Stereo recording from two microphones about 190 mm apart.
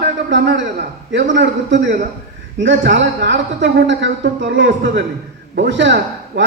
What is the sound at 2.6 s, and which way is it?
A woman's voice, 70° right (ahead or behind).